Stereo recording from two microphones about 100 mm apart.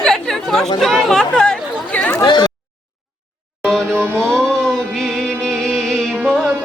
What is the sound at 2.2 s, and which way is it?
Speech, 45° left (ahead or behind).